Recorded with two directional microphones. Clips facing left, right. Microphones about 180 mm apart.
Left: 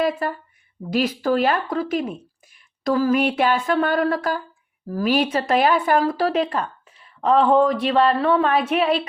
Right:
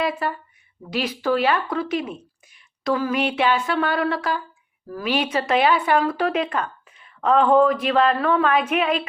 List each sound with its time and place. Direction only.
0.0 s speech: 45° left (ahead or behind)